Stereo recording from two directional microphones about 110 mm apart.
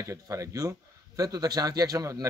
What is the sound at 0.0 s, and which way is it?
A man's voice, 30° right (ahead or behind).